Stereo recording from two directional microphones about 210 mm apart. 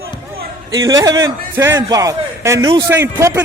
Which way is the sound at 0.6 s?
15° right (ahead or behind).